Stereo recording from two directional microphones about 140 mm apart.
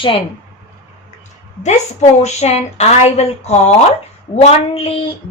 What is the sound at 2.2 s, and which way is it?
A woman's voice, 50° left (ahead or behind).